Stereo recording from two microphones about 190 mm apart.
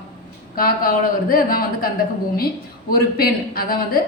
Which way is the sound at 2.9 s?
50° left (ahead or behind).